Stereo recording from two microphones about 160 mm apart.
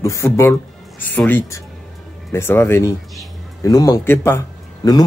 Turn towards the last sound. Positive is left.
turn(degrees=25)  # may be behind; listen again after turning